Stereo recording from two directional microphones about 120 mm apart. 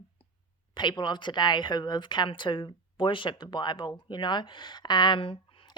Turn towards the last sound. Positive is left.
turn(degrees=45)  # may be behind; listen again after turning